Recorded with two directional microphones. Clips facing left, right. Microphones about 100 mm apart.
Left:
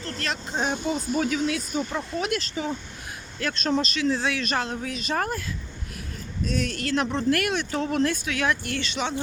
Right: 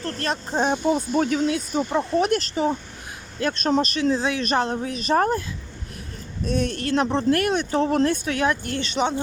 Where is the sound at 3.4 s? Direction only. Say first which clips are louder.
Right 4 dB; 30° right (ahead or behind).